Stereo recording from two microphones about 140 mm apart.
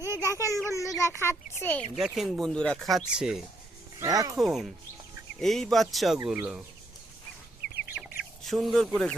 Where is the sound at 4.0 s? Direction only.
25° right (ahead or behind).